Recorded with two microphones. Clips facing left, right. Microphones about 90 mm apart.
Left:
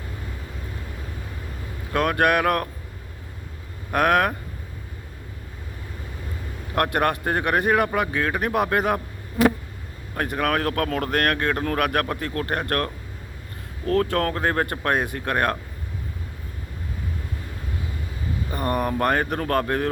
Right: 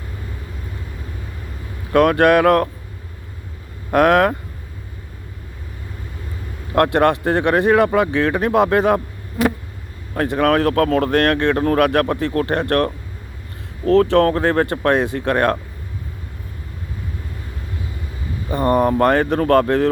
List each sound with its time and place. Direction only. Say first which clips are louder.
1.9 s speech: right 7 dB; 25° right (ahead or behind)
3.9 s speech: right 6 dB; 30° right (ahead or behind)
6.7 s speech: right 7 dB; 25° right (ahead or behind)
10.2 s speech: right 7 dB; 30° right (ahead or behind)
10.8 s speech: right 8 dB; 60° right (ahead or behind)
11.1 s speech: right 6 dB; 25° right (ahead or behind)
11.6 s speech: right 7 dB; 40° right (ahead or behind)
14.3 s speech: right 6 dB; 25° right (ahead or behind)
18.5 s speech: right 9 dB; 30° right (ahead or behind)